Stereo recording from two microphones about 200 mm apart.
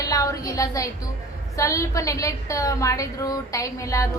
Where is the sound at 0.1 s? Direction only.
15° left (ahead or behind).